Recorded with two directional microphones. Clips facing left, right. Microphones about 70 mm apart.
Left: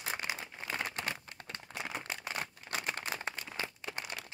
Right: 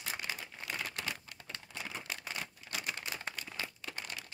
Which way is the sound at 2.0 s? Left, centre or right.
Left.